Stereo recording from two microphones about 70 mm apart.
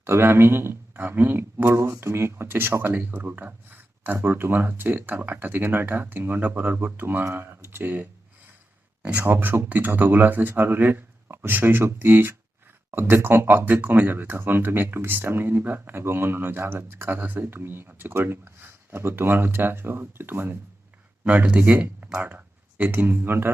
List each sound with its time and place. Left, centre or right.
0.0 s speech: right
9.1 s speech: right
21.2 s speech: centre
22.2 s a sound: right
22.9 s speech: right